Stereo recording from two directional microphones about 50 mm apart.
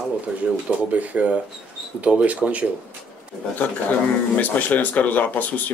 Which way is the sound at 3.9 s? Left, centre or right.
Left.